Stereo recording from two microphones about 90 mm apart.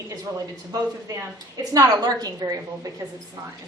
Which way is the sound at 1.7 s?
45° right (ahead or behind).